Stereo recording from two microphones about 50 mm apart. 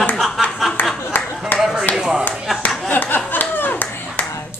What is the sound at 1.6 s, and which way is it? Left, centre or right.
Chop, centre.